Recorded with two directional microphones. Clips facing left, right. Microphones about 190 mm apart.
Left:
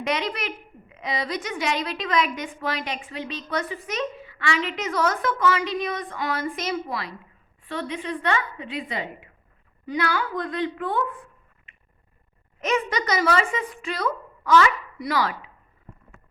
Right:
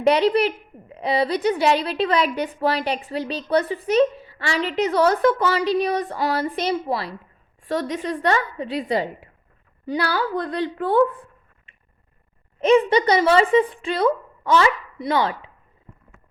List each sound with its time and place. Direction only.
0.0 s a woman's voice: 35° right (ahead or behind)
7.6 s a woman's voice: 40° right (ahead or behind)